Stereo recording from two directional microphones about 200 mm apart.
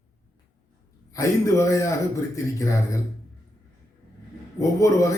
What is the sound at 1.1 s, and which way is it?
A man's voice, 15° left (ahead or behind).